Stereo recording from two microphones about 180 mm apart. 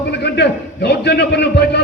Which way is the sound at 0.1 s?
70° left (ahead or behind).